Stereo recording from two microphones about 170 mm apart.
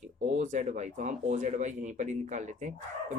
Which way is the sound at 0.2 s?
45° right (ahead or behind).